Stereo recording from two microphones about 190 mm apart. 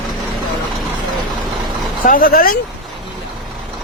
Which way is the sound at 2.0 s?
45° left (ahead or behind).